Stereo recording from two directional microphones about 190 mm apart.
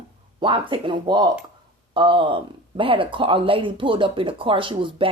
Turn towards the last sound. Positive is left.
turn(degrees=-25)  # may be behind; listen again after turning